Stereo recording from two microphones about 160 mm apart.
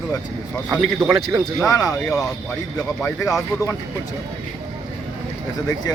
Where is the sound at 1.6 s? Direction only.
20° left (ahead or behind).